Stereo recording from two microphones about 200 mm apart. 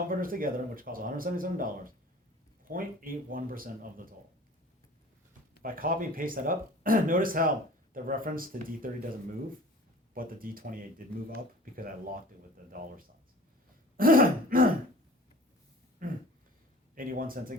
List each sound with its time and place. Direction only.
0.1 s speech: 45° right (ahead or behind)
5.6 s speech: 45° right (ahead or behind)
10.2 s speech: 45° right (ahead or behind)
13.9 s throat clearing: 45° right (ahead or behind)
16.0 s a sound: 45° right (ahead or behind)
16.9 s speech: 45° right (ahead or behind)